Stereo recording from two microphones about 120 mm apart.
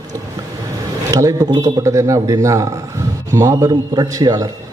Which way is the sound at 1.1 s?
25° right (ahead or behind).